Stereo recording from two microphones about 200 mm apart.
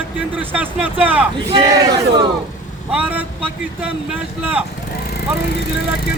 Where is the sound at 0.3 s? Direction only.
10° right (ahead or behind).